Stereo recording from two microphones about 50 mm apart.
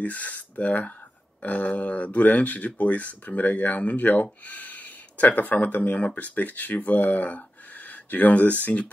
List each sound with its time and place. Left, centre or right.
0.0 s speech: left